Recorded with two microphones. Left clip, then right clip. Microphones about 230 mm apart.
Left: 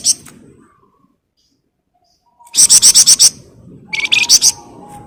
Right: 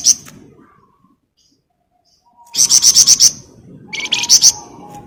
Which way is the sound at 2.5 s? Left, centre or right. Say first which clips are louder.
Left 2 dB; centre.